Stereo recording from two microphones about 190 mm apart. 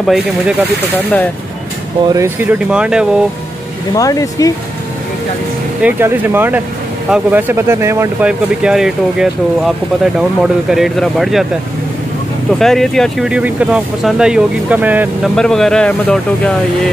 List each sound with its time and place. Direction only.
0.0 s speech: centre (ahead or behind)
0.9 s speech: 10° left (ahead or behind)
2.0 s speech: 15° right (ahead or behind)
3.9 s speech: 20° left (ahead or behind)
5.8 s speech: 10° right (ahead or behind)
12.4 s speech: centre (ahead or behind)
15.3 s speech: 5° left (ahead or behind)